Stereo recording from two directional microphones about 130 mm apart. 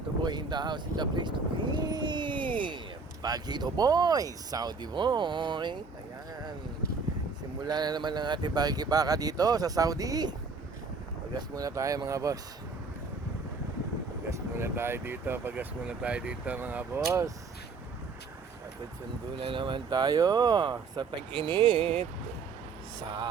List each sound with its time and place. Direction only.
0.2 s speech: 35° right (ahead or behind)
7.6 s speech: 30° right (ahead or behind)
11.3 s speech: 25° right (ahead or behind)
14.3 s speech: 20° right (ahead or behind)
19.4 s speech: 40° right (ahead or behind)